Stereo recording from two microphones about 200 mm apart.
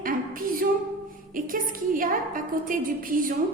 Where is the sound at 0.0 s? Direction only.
45° right (ahead or behind).